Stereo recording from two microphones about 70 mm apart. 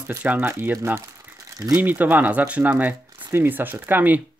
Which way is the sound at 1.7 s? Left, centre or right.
Right.